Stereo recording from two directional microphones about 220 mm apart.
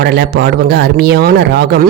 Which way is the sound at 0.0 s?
50° right (ahead or behind).